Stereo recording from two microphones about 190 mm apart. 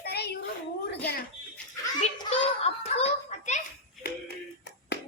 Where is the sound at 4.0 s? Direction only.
60° left (ahead or behind).